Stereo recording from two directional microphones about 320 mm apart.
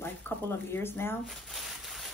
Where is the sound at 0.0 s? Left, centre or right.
Centre.